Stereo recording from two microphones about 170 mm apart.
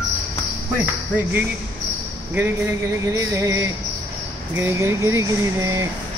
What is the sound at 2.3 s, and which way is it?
Speech, 15° right (ahead or behind).